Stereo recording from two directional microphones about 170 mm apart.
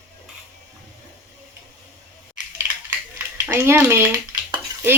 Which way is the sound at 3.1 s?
10° right (ahead or behind).